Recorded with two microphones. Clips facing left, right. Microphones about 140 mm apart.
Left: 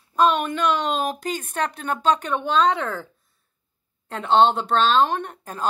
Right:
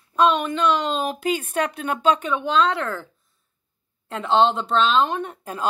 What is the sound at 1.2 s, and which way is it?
Speech, 10° right (ahead or behind).